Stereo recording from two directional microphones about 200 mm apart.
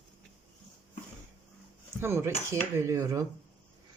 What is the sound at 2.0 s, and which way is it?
Cutlery, 10° right (ahead or behind).